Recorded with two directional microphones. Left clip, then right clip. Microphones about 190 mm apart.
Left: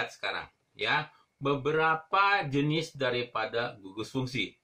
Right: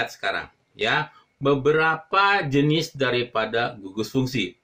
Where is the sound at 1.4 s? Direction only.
10° right (ahead or behind).